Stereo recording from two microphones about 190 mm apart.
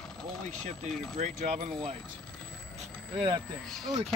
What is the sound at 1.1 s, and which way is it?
Speech, 40° right (ahead or behind).